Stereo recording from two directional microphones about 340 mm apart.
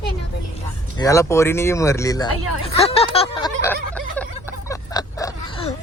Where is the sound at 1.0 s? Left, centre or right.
Centre.